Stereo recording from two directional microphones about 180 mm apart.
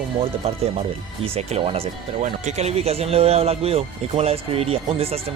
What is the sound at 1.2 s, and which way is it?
Speech, 35° right (ahead or behind).